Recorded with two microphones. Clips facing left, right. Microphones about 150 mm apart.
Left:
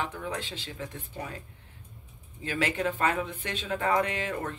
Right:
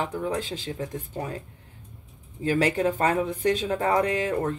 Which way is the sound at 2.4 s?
40° right (ahead or behind).